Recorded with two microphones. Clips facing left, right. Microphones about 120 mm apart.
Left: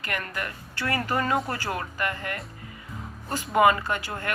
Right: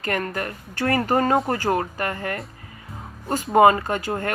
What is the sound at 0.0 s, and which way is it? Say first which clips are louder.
Speech: right 6 dB; 40° right (ahead or behind).